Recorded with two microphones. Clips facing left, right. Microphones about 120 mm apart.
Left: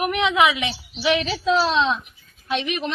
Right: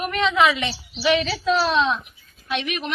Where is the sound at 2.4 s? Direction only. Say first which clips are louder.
Left 2 dB; 25° left (ahead or behind).